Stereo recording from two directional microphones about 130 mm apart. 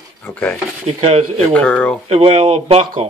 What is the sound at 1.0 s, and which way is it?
Speech, 50° right (ahead or behind).